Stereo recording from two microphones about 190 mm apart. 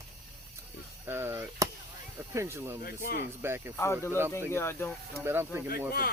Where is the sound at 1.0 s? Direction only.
15° right (ahead or behind).